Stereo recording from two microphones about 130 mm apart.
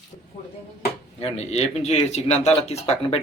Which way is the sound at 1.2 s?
55° left (ahead or behind).